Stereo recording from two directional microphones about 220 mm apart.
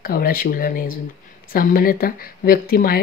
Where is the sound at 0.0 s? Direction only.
40° left (ahead or behind).